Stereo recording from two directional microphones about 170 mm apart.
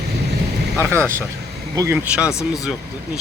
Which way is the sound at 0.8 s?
15° right (ahead or behind).